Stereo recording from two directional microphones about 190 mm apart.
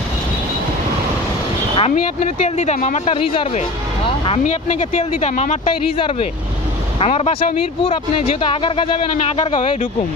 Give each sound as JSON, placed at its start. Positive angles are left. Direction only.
{"t": 1.8, "sound": "speech", "side_deg": 40}
{"t": 5.9, "sound": "speech", "side_deg": 25}